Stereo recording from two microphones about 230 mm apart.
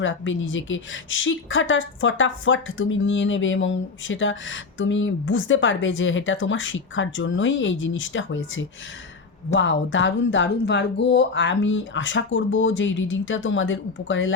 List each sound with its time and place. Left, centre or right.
0.0 s speech: left